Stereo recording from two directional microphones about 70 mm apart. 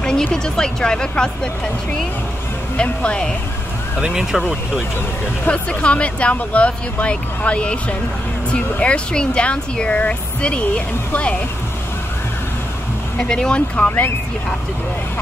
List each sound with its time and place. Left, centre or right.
0.0 s speech: centre
4.0 s speech: centre
5.5 s speech: centre
13.2 s speech: centre